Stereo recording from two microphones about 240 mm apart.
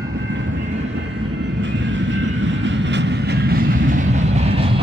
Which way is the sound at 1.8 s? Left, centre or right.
Right.